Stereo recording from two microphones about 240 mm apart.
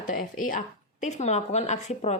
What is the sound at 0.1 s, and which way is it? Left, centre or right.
Speech, left.